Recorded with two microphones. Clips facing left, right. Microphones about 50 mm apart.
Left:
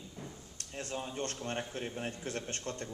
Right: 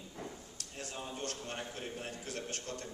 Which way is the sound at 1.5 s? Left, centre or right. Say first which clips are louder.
Left 3 dB; left.